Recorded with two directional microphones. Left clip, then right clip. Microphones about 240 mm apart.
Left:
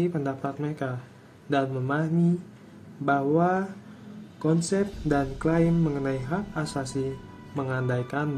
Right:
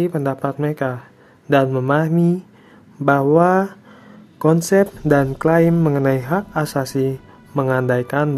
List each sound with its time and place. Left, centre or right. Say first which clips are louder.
0.0 s speech: right 8 dB; right